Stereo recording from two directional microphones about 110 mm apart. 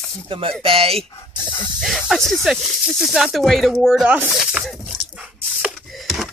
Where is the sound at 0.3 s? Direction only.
55° right (ahead or behind).